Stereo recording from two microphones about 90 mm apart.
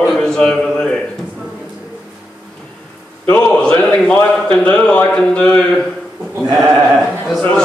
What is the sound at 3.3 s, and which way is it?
Speech, 10° left (ahead or behind).